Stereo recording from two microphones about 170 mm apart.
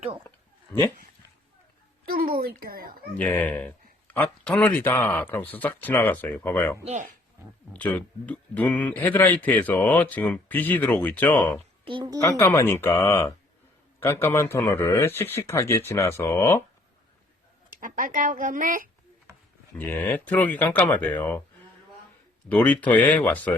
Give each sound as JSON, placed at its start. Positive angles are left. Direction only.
{"t": 0.3, "sound": "a sound", "side_deg": 15}
{"t": 2.4, "sound": "a child's voice", "side_deg": -65}
{"t": 3.2, "sound": "speech", "side_deg": 10}
{"t": 6.8, "sound": "speech", "side_deg": -45}
{"t": 7.7, "sound": "speech", "side_deg": 10}
{"t": 11.9, "sound": "a child's voice", "side_deg": -25}
{"t": 12.4, "sound": "a man's voice", "side_deg": 15}
{"t": 17.7, "sound": "speech", "side_deg": -55}
{"t": 19.8, "sound": "speech", "side_deg": 10}
{"t": 22.4, "sound": "speech", "side_deg": 10}